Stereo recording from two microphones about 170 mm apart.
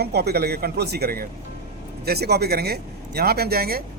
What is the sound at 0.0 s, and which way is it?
Speech, 70° right (ahead or behind).